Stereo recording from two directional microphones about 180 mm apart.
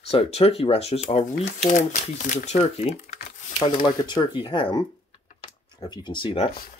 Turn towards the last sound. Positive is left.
turn(degrees=30)  # may be behind; listen again after turning